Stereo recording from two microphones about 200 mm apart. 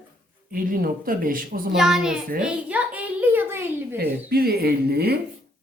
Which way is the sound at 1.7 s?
5° right (ahead or behind).